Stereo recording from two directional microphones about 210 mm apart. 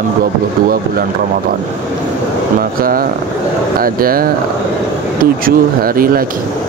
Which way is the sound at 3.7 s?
45° right (ahead or behind).